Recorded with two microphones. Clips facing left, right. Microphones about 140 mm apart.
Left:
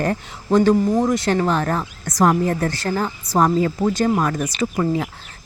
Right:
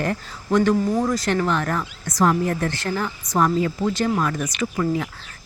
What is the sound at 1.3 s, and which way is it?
A woman's voice, 35° left (ahead or behind).